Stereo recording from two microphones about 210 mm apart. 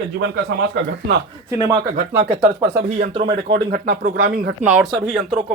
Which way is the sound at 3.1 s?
25° right (ahead or behind).